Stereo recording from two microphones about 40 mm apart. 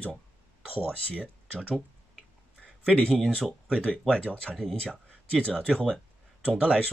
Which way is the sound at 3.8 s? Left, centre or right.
Left.